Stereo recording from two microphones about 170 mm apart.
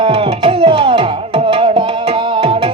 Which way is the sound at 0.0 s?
35° right (ahead or behind).